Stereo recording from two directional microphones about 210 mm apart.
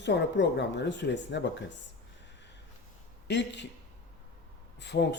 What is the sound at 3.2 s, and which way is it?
Speech, 55° left (ahead or behind).